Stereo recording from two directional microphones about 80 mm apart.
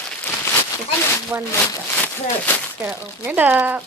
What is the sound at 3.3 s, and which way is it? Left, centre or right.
Speech, right.